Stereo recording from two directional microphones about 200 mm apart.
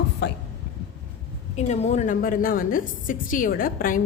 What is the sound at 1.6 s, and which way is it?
A woman's voice, 35° left (ahead or behind).